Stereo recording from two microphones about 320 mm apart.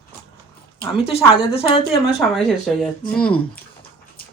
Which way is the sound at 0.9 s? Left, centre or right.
Centre.